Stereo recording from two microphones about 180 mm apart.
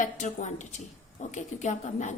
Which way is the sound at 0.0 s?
45° left (ahead or behind).